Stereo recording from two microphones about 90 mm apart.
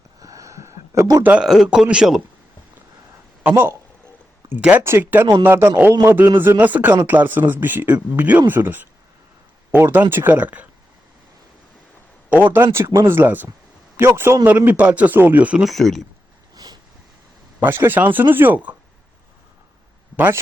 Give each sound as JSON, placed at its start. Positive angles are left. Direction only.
{"t": 0.2, "sound": "a sound", "side_deg": -40}
{"t": 1.2, "sound": "speech", "side_deg": -15}
{"t": 3.5, "sound": "speech", "side_deg": -30}
{"t": 4.8, "sound": "speech", "side_deg": -25}
{"t": 9.8, "sound": "speech", "side_deg": -25}
{"t": 12.3, "sound": "a man's voice", "side_deg": -20}
{"t": 15.6, "sound": "speech", "side_deg": 0}
{"t": 16.6, "sound": "vehicle", "side_deg": -50}
{"t": 17.6, "sound": "speech", "side_deg": -25}
{"t": 20.1, "sound": "speech", "side_deg": -20}